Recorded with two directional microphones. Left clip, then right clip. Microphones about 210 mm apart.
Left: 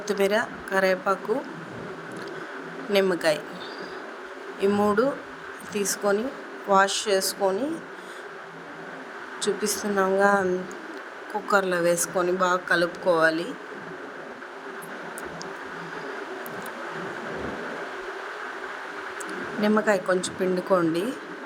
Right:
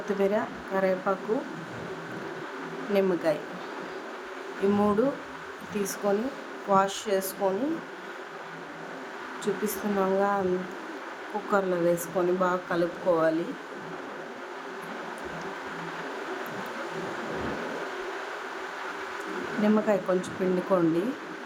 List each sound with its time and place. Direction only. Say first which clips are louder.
0.2 s speech: left 4 dB; 35° left (ahead or behind)
2.9 s speech: left 3 dB; 35° left (ahead or behind)
4.8 s speech: left 3 dB; 25° left (ahead or behind)
9.4 s speech: left 4 dB; 25° left (ahead or behind)
11.5 s speech: left 3 dB; 30° left (ahead or behind)
19.6 s speech: left 3 dB; 30° left (ahead or behind)